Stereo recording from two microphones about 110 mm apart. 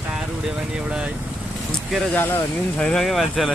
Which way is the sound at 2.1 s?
20° left (ahead or behind).